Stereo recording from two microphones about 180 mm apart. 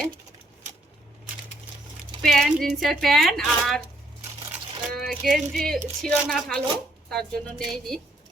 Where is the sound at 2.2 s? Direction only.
Centre (ahead or behind).